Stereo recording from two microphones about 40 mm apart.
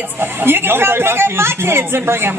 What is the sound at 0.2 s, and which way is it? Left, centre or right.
Speech, right.